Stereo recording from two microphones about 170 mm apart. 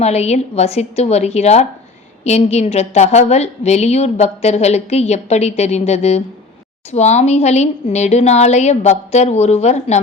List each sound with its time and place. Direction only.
0.0 s a woman's voice: 40° left (ahead or behind)